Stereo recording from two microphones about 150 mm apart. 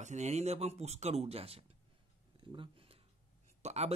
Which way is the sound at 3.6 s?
45° right (ahead or behind).